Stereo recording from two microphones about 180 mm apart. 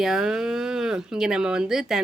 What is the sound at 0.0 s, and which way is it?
Speech, 5° right (ahead or behind).